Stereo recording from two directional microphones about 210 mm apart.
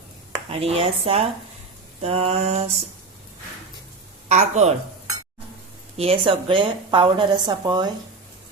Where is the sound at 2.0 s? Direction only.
30° right (ahead or behind).